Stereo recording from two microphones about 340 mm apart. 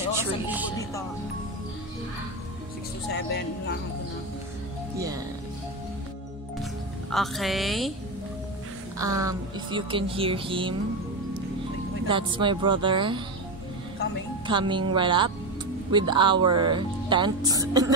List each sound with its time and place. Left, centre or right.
0.2 s music: centre
3.1 s speech: left
4.9 s speech: centre
7.1 s a woman's voice: centre
8.9 s speech: centre
12.1 s speech: centre
14.5 s speech: centre